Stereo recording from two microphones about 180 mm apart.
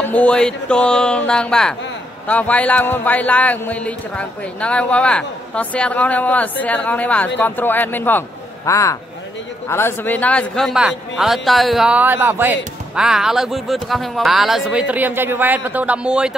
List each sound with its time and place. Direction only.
0.0 s speech: 5° left (ahead or behind)